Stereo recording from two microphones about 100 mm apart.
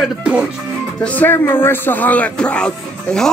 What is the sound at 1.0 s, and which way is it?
Speech, 15° left (ahead or behind).